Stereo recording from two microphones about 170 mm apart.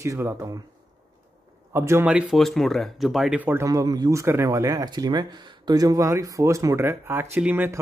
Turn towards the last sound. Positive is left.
turn(degrees=-10)  # may be behind; listen again after turning